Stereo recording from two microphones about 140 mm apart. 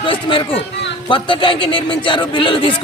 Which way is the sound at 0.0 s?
35° left (ahead or behind).